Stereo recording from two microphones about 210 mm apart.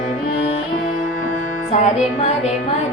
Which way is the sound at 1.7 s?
35° left (ahead or behind).